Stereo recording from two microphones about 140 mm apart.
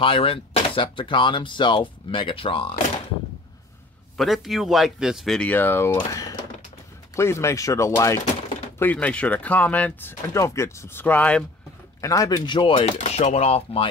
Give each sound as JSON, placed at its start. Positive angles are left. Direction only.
{"t": 0.0, "sound": "speech", "side_deg": 40}
{"t": 4.2, "sound": "speech", "side_deg": 0}
{"t": 12.0, "sound": "speech", "side_deg": 25}